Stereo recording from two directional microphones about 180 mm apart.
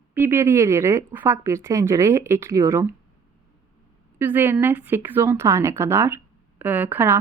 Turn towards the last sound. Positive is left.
turn(degrees=-10)  # may be behind; listen again after turning